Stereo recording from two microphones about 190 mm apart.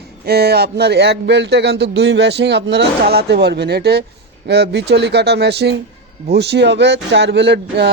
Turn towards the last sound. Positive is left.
turn(degrees=-65)  # may be behind; listen again after turning